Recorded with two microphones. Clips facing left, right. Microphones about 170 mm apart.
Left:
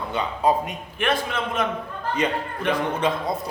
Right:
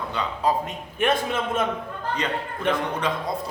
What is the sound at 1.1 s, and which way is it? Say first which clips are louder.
Speech: even; 25° right (ahead or behind).